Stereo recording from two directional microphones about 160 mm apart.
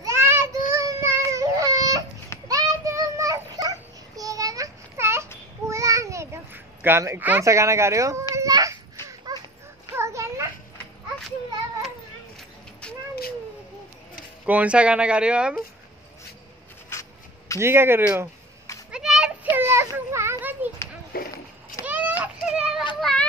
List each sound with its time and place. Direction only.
0.0 s child singing: 15° right (ahead or behind)
5.7 s a sound: 20° right (ahead or behind)
9.3 s dog: 25° right (ahead or behind)
9.9 s children playing: 20° right (ahead or behind)
12.8 s cat: 5° left (ahead or behind)
14.4 s speech: 10° right (ahead or behind)
17.6 s speech: 15° right (ahead or behind)
18.9 s children playing: 5° right (ahead or behind)
19.5 s a sound: 15° right (ahead or behind)
21.1 s a sound: 70° left (ahead or behind)
21.8 s a sound: 10° right (ahead or behind)
22.9 s children playing: centre (ahead or behind)